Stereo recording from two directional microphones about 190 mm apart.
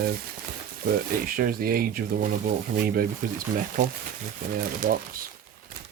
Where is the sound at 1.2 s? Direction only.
50° right (ahead or behind).